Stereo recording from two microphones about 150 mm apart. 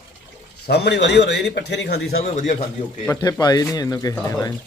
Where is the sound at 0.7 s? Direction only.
90° left.